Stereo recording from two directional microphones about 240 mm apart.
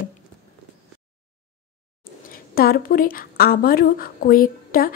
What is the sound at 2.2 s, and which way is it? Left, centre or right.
A woman's voice, left.